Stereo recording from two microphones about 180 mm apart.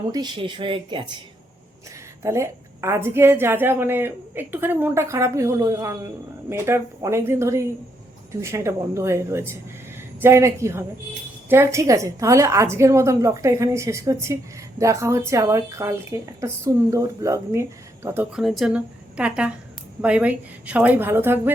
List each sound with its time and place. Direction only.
0.1 s speech: 25° right (ahead or behind)
2.2 s a woman's voice: 15° right (ahead or behind)